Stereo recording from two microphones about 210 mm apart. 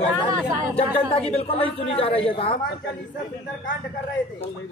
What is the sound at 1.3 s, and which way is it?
Speech, 30° left (ahead or behind).